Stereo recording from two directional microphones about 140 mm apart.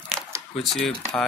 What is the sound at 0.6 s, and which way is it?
Speech, centre (ahead or behind).